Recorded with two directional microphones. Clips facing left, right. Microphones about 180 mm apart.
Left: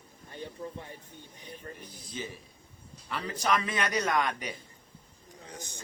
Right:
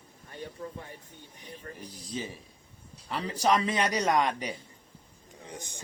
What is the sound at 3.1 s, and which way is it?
A man's voice, 35° right (ahead or behind).